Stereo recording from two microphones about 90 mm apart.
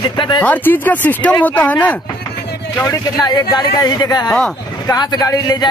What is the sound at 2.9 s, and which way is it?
Speech, 45° left (ahead or behind).